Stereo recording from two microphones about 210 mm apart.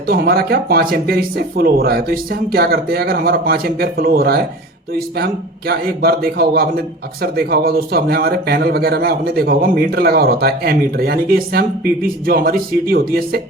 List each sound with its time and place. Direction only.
0.1 s speech: 45° right (ahead or behind)